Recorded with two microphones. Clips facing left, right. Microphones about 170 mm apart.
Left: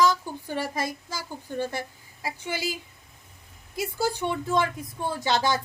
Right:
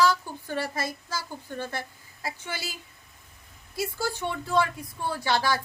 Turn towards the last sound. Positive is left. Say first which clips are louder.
# left 1 dB
turn(degrees=20)  # may be behind; listen again after turning